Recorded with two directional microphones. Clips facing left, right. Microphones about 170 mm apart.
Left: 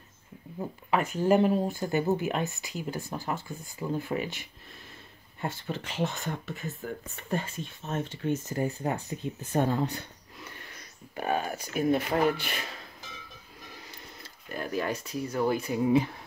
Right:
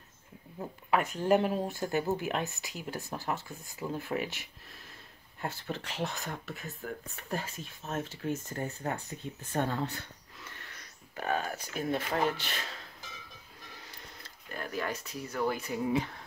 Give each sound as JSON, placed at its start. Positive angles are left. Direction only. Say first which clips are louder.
{"t": 0.6, "sound": "speech", "louder": "left 2 dB", "side_deg": 0}
{"t": 8.5, "sound": "speech", "louder": "left 5 dB", "side_deg": 15}
{"t": 14.5, "sound": "speech", "louder": "left 5 dB", "side_deg": 20}